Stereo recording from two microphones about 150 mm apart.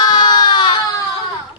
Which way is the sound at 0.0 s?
30° left (ahead or behind).